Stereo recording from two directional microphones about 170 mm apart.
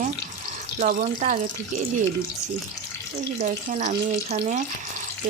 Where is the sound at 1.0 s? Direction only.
45° right (ahead or behind).